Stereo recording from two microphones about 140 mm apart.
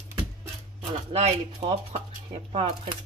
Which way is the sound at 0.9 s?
50° right (ahead or behind).